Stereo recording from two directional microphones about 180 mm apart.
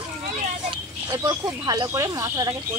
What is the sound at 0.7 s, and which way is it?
Speech, 20° right (ahead or behind).